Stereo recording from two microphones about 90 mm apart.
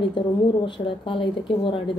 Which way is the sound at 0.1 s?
60° left (ahead or behind).